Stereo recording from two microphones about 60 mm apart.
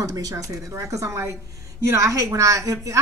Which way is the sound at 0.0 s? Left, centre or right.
Right.